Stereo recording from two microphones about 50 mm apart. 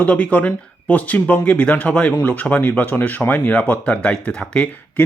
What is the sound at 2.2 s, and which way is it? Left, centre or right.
Speech, left.